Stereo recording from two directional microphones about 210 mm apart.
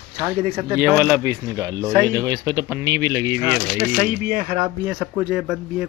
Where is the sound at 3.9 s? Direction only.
40° right (ahead or behind).